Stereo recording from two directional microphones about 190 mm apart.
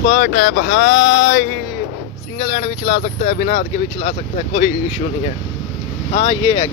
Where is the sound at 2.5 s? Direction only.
35° left (ahead or behind).